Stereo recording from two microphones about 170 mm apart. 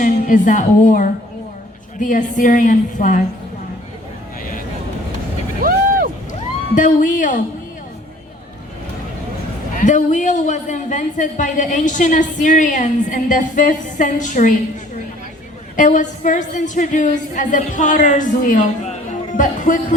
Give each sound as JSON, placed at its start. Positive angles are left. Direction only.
{"t": 0.0, "sound": "a woman's voice", "side_deg": 50}
{"t": 6.7, "sound": "a woman's voice", "side_deg": 50}
{"t": 9.7, "sound": "a woman's voice", "side_deg": 45}
{"t": 15.7, "sound": "a woman's voice", "side_deg": 50}